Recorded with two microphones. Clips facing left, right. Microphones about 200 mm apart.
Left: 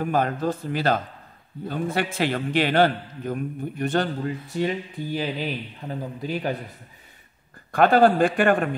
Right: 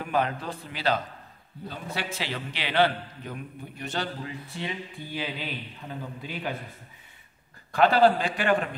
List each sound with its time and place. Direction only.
0.0 s a man's voice: 45° left (ahead or behind)
7.7 s a man's voice: 50° left (ahead or behind)